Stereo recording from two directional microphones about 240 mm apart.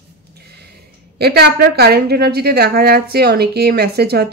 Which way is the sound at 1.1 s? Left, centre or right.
Right.